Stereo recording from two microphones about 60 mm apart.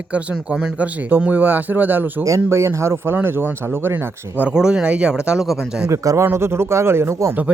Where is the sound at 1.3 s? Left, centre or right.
Right.